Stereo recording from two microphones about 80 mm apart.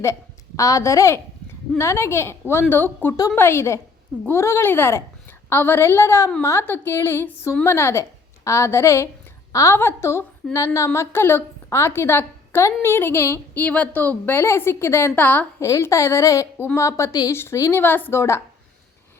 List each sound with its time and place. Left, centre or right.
0.0 s a woman's voice: left
15.1 s speech: left
15.6 s a woman's voice: left
18.2 s a woman's voice: left